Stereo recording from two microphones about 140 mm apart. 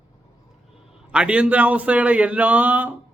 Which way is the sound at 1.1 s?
5° right (ahead or behind).